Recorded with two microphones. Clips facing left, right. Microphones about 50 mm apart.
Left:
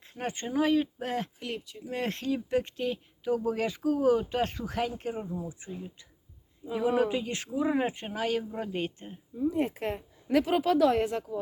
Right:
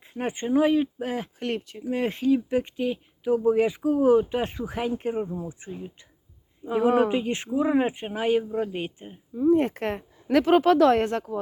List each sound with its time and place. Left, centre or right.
0.0 s speech: centre
1.4 s speech: right
1.9 s speech: centre
4.9 s speech: right
6.7 s speech: right
7.1 s speech: right
8.5 s speech: centre
9.3 s speech: right